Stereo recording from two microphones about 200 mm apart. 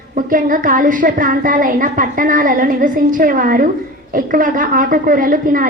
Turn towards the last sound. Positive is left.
turn(degrees=-45)  # may be behind; listen again after turning